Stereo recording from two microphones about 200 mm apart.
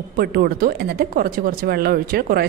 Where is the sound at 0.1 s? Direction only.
50° right (ahead or behind).